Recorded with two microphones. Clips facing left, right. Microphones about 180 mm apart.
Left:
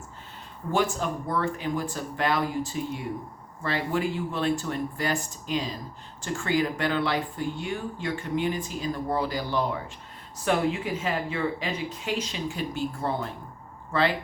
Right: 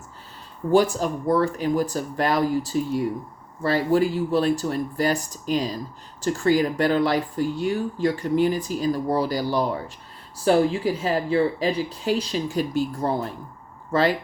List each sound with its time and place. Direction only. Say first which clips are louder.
0.7 s speech: right 7 dB; 35° right (ahead or behind)